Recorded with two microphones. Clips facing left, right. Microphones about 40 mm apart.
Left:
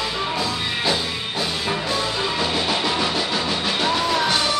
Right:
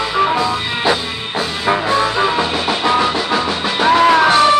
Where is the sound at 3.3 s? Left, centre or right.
Right.